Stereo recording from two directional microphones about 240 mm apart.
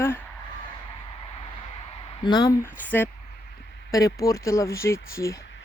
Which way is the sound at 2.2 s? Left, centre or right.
Centre.